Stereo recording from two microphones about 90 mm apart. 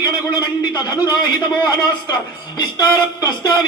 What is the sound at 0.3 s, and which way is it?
A man's voice, 50° left (ahead or behind).